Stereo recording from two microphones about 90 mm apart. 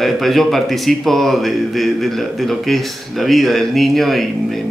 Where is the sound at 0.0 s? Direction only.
Centre (ahead or behind).